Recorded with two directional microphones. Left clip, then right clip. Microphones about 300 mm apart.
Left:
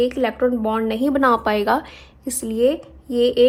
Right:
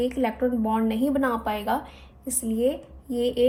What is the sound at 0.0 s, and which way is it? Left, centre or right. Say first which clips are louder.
A woman's voice: left 6 dB; left.